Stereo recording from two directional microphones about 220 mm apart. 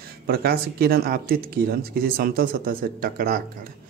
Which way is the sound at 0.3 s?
45° right (ahead or behind).